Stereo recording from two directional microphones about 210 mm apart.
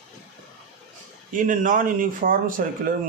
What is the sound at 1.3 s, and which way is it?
Speech, 40° right (ahead or behind).